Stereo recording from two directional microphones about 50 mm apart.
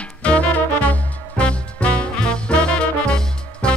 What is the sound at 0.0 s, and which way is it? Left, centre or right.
Music, left.